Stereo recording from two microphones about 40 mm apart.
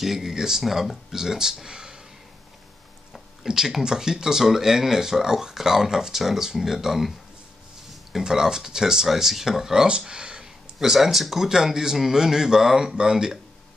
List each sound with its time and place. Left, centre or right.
0.0 s speech: centre
3.4 s speech: centre
8.2 s speech: centre
10.8 s speech: centre